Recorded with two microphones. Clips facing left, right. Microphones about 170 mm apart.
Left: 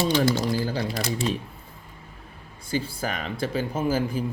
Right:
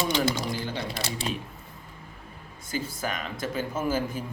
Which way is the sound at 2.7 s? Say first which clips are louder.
Left 3 dB; 30° left (ahead or behind).